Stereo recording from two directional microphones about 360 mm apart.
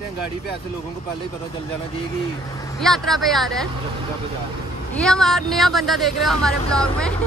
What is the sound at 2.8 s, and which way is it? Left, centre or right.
Speech, centre.